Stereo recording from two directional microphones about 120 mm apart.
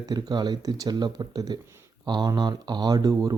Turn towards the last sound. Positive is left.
turn(degrees=-35)  # may be behind; listen again after turning